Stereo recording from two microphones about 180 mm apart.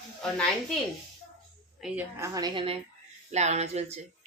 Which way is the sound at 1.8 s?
5° right (ahead or behind).